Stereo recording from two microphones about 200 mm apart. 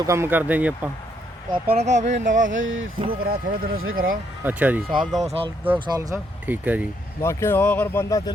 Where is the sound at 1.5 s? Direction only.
30° right (ahead or behind).